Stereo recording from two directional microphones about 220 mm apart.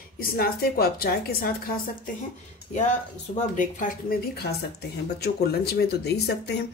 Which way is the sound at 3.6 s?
40° left (ahead or behind).